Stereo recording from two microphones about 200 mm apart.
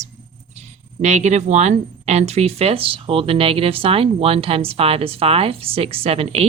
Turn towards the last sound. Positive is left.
turn(degrees=-30)  # may be behind; listen again after turning